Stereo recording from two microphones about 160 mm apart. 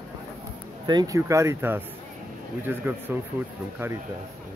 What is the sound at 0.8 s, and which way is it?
A man's voice, 25° right (ahead or behind).